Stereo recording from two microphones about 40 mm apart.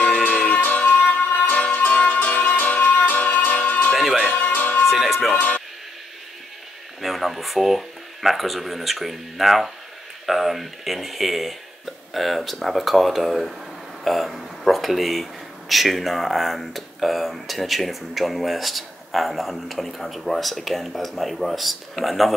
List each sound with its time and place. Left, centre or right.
0.5 s music: left
3.9 s music: centre
4.3 s music: left
4.8 s music: centre
7.0 s speech: centre